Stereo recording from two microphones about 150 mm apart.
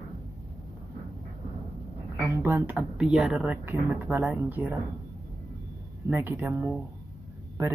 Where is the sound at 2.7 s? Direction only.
5° right (ahead or behind).